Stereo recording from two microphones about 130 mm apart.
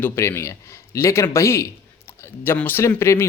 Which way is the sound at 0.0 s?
20° left (ahead or behind).